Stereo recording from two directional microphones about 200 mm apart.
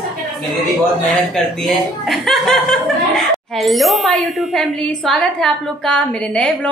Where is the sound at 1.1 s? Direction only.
Centre (ahead or behind).